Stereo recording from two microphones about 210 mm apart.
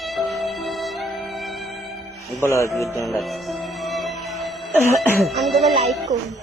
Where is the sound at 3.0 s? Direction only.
Centre (ahead or behind).